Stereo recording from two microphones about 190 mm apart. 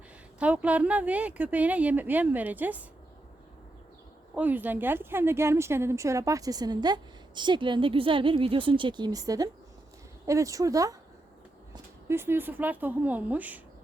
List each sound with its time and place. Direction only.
0.3 s a woman's voice: 5° right (ahead or behind)
4.4 s a woman's voice: 10° right (ahead or behind)